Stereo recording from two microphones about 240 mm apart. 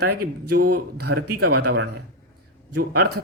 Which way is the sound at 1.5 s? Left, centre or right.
Right.